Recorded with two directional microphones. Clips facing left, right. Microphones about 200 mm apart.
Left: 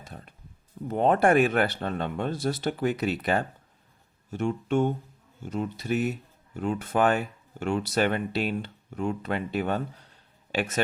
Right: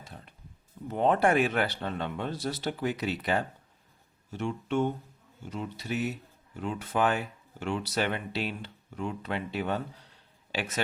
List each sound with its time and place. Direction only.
0.9 s speech: 50° left (ahead or behind)